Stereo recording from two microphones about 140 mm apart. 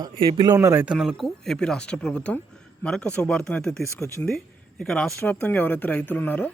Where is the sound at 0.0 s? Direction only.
30° right (ahead or behind).